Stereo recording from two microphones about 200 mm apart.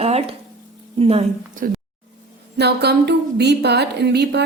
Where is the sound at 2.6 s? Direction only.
55° right (ahead or behind).